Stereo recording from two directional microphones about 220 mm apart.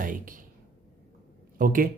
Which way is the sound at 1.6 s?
40° right (ahead or behind).